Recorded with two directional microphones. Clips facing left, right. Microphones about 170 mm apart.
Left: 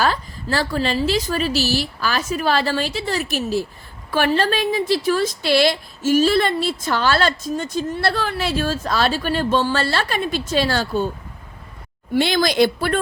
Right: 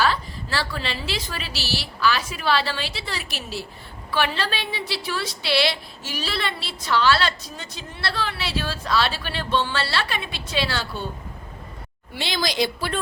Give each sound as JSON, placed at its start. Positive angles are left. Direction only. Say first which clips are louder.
{"t": 0.0, "sound": "a woman's voice", "louder": "left 2 dB", "side_deg": 45}
{"t": 12.1, "sound": "a woman's voice", "louder": "left 8 dB", "side_deg": 55}